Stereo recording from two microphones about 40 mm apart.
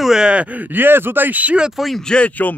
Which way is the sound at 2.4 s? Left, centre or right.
Left.